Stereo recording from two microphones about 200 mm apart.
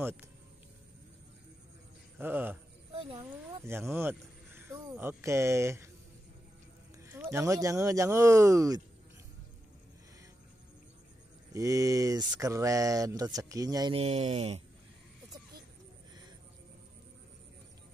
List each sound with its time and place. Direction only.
2.1 s speech: 10° right (ahead or behind)
2.9 s a sound: 30° right (ahead or behind)
3.2 s speech: 15° right (ahead or behind)
7.0 s speech: 15° right (ahead or behind)
11.5 s speech: 15° right (ahead or behind)
13.9 s speech: 30° right (ahead or behind)